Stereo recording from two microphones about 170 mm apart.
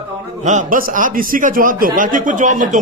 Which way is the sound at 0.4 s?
50° right (ahead or behind).